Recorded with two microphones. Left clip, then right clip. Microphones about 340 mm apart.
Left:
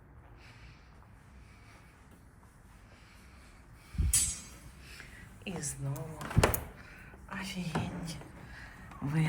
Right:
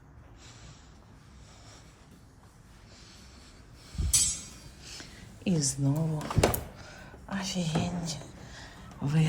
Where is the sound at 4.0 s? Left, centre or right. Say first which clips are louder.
Right 1 dB; centre.